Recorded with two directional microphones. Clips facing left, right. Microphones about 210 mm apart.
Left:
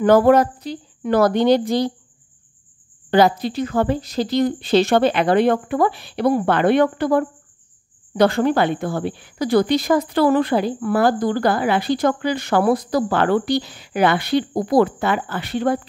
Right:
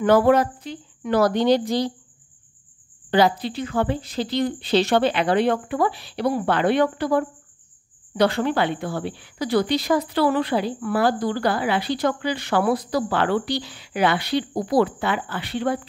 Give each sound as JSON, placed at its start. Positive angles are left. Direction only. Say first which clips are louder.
{"t": 0.0, "sound": "a woman's voice", "louder": "left 3 dB", "side_deg": 45}
{"t": 1.2, "sound": "a woman's voice", "louder": "left 3 dB", "side_deg": 55}
{"t": 3.1, "sound": "a woman's voice", "louder": "left 3 dB", "side_deg": 45}